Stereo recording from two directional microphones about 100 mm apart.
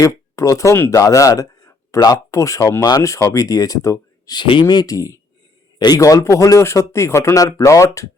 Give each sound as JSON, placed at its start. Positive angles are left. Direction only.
{"t": 0.0, "sound": "speech", "side_deg": 30}
{"t": 4.4, "sound": "speech", "side_deg": 55}
{"t": 4.6, "sound": "speech", "side_deg": 40}